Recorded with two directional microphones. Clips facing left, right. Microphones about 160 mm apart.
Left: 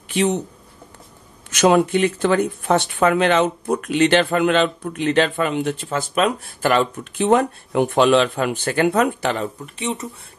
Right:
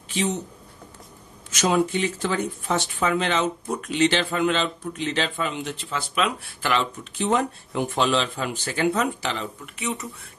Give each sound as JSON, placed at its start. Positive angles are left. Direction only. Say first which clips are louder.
{"t": 0.1, "sound": "speech", "louder": "left 6 dB", "side_deg": 60}
{"t": 1.5, "sound": "speech", "louder": "left 6 dB", "side_deg": 65}
{"t": 9.8, "sound": "speech", "louder": "left 4 dB", "side_deg": 30}